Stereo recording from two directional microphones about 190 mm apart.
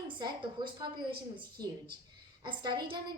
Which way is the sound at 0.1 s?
25° right (ahead or behind).